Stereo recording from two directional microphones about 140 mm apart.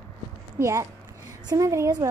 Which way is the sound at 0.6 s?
20° right (ahead or behind).